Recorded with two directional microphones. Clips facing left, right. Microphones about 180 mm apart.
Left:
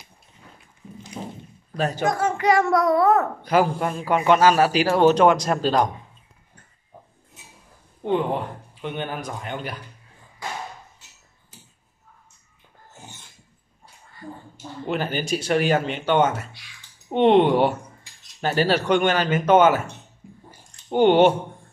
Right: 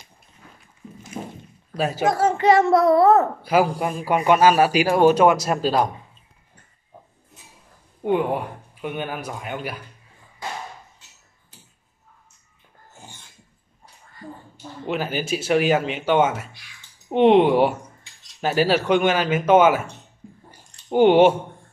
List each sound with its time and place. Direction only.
1.8 s a man's voice: 10° right (ahead or behind)
2.0 s a child's voice: 30° right (ahead or behind)
3.5 s a man's voice: 10° right (ahead or behind)
8.0 s a man's voice: 10° right (ahead or behind)
14.9 s speech: centre (ahead or behind)
20.9 s speech: 5° right (ahead or behind)